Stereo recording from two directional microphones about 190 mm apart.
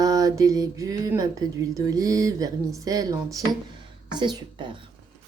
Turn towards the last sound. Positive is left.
turn(degrees=-25)  # may be behind; listen again after turning